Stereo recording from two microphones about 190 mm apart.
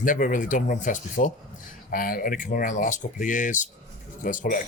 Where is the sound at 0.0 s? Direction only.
45° left (ahead or behind).